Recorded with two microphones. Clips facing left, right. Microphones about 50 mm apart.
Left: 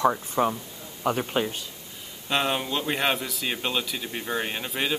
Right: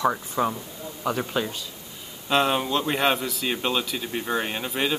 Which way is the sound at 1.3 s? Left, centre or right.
Left.